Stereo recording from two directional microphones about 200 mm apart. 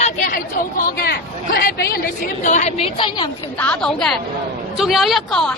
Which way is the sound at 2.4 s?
35° left (ahead or behind).